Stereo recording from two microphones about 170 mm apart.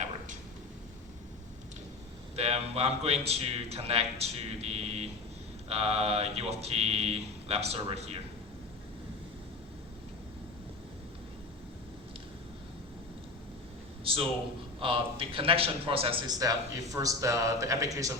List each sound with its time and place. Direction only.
2.3 s a man's voice: 35° right (ahead or behind)
14.0 s a sound: 30° right (ahead or behind)
14.8 s a man's voice: 30° right (ahead or behind)